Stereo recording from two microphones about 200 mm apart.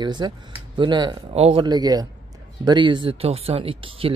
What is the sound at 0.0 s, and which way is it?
Speech, 20° right (ahead or behind).